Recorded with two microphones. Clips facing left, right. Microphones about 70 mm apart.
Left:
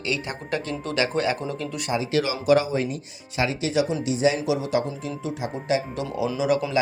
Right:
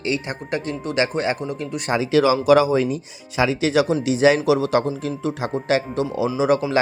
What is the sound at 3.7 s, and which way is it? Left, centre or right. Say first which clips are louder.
Speech: right 4 dB; right.